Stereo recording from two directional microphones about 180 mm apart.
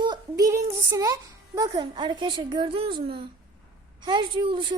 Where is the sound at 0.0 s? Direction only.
20° right (ahead or behind).